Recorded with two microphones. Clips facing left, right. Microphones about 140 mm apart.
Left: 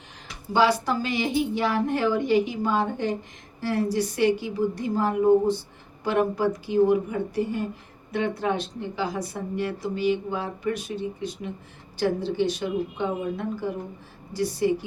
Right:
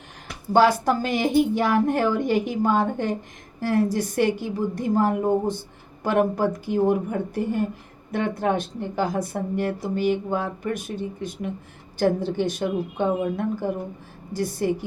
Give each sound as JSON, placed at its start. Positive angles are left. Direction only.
{"t": 0.3, "sound": "speech", "side_deg": -50}